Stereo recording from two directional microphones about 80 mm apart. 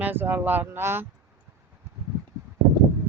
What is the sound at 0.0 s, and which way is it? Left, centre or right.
Speech, right.